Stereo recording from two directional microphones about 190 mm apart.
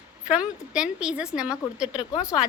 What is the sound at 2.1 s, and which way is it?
Speech, 15° left (ahead or behind).